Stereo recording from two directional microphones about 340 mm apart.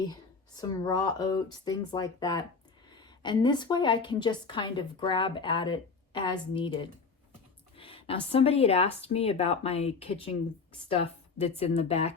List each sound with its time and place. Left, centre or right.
0.1 s a woman's voice: centre